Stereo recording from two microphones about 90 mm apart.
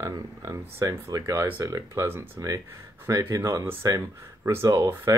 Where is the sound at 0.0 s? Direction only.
35° right (ahead or behind).